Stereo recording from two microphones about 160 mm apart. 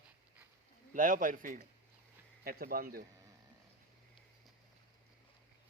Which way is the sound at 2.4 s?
65° right (ahead or behind).